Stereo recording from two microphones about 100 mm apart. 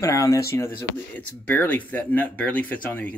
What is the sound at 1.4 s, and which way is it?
Speech, 20° left (ahead or behind).